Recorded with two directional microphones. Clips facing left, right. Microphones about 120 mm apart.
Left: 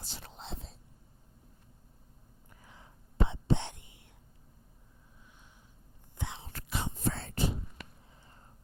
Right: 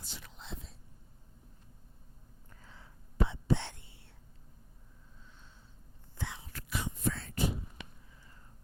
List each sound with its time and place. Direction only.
0.0 s whispering: 30° left (ahead or behind)
2.5 s whispering: 20° left (ahead or behind)
6.1 s whispering: 20° left (ahead or behind)
8.1 s a sound: 30° left (ahead or behind)